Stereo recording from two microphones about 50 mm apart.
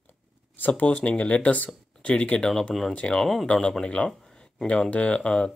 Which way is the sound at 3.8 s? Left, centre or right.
Left.